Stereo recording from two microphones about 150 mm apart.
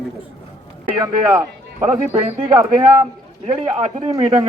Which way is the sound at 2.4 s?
25° right (ahead or behind).